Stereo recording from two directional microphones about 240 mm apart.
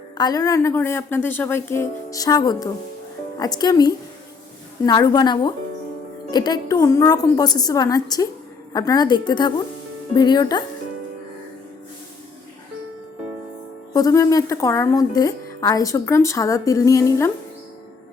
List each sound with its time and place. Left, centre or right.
0.2 s a woman's voice: centre
13.9 s a woman's voice: centre